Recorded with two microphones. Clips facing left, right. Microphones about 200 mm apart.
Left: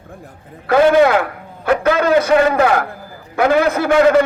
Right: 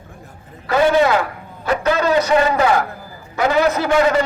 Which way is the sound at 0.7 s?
55° left (ahead or behind).